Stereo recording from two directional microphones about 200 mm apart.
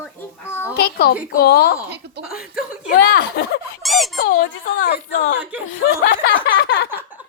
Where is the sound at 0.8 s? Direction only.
50° left (ahead or behind).